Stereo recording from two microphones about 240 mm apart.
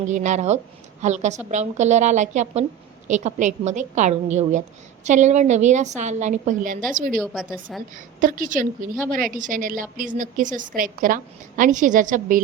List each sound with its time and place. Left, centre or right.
0.0 s a woman's voice: right
7.2 s a woman's voice: centre
7.9 s a woman's voice: right